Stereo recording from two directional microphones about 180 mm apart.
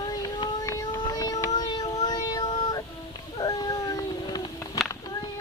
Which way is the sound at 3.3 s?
20° left (ahead or behind).